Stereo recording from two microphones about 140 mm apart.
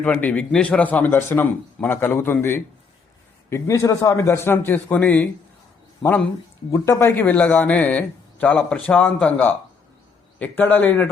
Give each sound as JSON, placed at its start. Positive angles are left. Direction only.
{"t": 0.0, "sound": "speech", "side_deg": 10}